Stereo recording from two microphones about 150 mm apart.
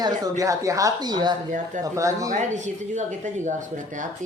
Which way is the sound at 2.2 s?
55° right (ahead or behind).